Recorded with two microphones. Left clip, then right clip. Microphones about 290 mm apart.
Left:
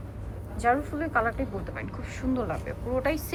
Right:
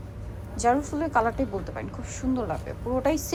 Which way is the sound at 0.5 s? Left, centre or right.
Centre.